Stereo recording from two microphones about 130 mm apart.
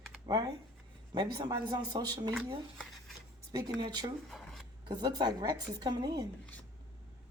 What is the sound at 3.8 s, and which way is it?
Speech, 35° right (ahead or behind).